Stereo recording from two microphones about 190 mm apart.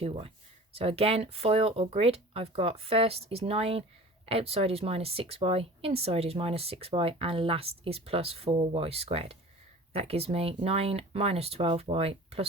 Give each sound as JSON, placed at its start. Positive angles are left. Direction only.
{"t": 0.0, "sound": "speech", "side_deg": -30}